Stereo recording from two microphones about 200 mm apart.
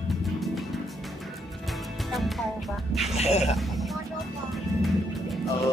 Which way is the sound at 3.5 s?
Centre (ahead or behind).